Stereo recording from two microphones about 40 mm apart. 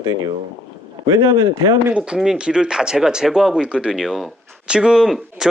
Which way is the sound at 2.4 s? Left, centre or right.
Right.